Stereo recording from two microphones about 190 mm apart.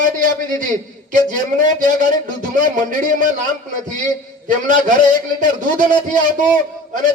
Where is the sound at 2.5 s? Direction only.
45° right (ahead or behind).